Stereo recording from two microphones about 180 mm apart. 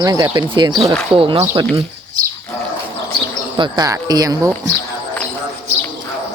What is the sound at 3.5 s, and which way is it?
Speech, 20° right (ahead or behind).